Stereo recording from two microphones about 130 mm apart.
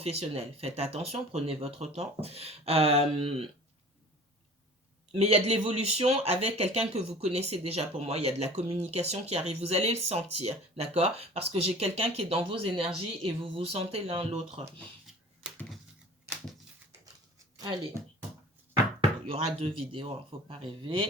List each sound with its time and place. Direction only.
0.0 s speech: 50° right (ahead or behind)
5.1 s speech: 50° right (ahead or behind)
19.3 s speech: 50° right (ahead or behind)